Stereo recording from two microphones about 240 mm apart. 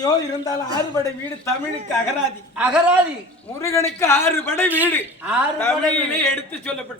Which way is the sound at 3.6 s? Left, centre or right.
Centre.